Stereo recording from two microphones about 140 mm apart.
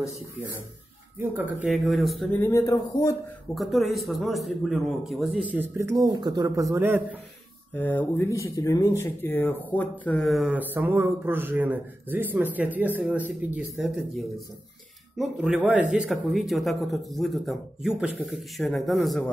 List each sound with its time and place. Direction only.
1.2 s speech: 15° right (ahead or behind)
1.7 s a man's voice: centre (ahead or behind)
2.3 s speech: 20° left (ahead or behind)
3.5 s a man's voice: centre (ahead or behind)
5.8 s speech: 20° right (ahead or behind)
7.7 s speech: 15° left (ahead or behind)
10.2 s a man's voice: centre (ahead or behind)
10.5 s speech: 10° right (ahead or behind)
15.1 s a man's voice: 5° right (ahead or behind)